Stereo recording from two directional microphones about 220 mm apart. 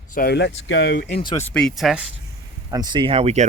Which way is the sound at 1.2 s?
20° left (ahead or behind).